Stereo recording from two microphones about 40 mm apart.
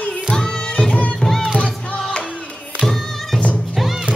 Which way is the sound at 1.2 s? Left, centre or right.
Centre.